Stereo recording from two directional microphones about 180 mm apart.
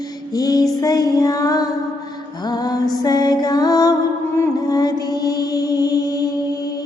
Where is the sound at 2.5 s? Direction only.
20° left (ahead or behind).